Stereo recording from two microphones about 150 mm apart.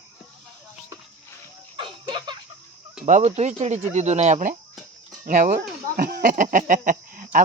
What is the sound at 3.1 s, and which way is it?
Speech, 50° right (ahead or behind).